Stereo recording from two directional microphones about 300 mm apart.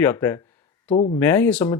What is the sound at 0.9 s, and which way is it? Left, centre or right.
Speech, left.